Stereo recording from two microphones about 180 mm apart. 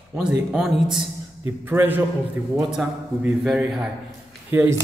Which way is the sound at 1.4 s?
10° right (ahead or behind).